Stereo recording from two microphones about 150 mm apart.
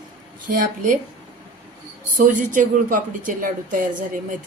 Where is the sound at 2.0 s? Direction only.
60° right (ahead or behind).